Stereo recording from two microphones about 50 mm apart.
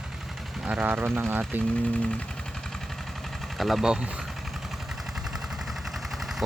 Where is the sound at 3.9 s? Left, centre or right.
Centre.